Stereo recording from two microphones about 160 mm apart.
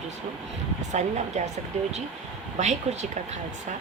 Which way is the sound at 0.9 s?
45° right (ahead or behind).